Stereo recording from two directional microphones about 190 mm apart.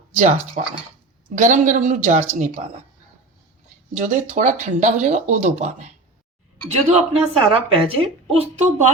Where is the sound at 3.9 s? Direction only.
40° right (ahead or behind).